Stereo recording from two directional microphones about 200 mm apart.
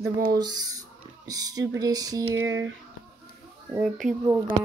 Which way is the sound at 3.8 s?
Centre (ahead or behind).